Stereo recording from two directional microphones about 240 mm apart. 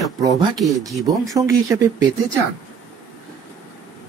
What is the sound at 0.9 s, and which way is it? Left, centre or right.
Speech, centre.